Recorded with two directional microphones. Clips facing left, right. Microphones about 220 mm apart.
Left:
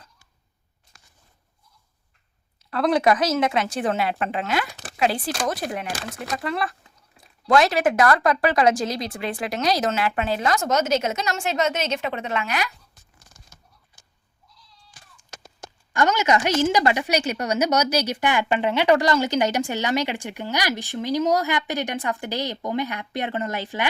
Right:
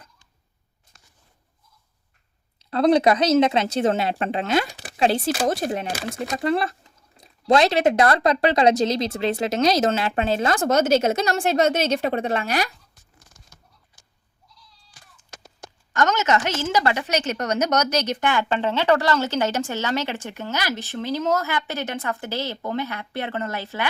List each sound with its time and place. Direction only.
2.6 s a woman's voice: 25° right (ahead or behind)
15.9 s speech: 10° left (ahead or behind)